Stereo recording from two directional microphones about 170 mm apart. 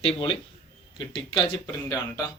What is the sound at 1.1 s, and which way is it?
Speech, 30° left (ahead or behind).